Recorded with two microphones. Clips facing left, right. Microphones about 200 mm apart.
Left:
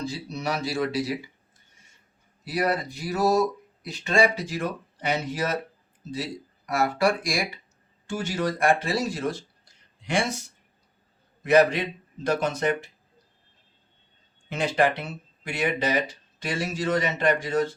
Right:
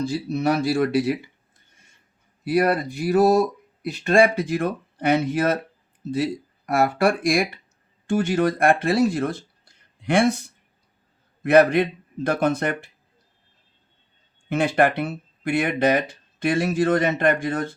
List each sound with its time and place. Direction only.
0.1 s speech: 55° right (ahead or behind)
2.4 s speech: 55° right (ahead or behind)
6.7 s speech: 55° right (ahead or behind)
11.4 s speech: 55° right (ahead or behind)
14.5 s speech: 55° right (ahead or behind)